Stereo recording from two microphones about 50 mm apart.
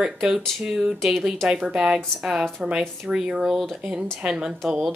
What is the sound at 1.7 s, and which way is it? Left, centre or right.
Speech, centre.